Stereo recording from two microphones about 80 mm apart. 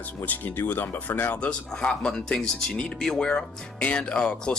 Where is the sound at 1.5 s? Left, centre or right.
Centre.